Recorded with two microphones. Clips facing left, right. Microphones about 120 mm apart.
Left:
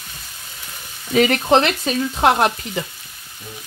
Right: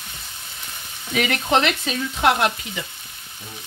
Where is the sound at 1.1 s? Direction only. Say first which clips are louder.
Left 6 dB; 35° left (ahead or behind).